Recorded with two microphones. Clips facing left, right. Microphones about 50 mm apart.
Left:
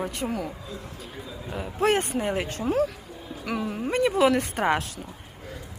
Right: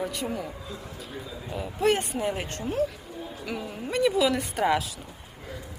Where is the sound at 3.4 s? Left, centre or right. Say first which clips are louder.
Left 6 dB; left.